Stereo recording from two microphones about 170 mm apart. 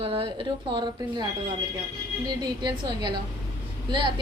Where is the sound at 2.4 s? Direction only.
25° right (ahead or behind).